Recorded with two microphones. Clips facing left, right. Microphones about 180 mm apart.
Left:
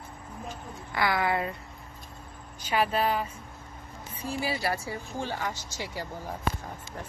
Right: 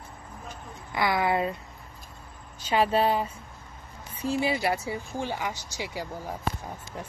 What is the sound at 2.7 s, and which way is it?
Speech, 30° right (ahead or behind).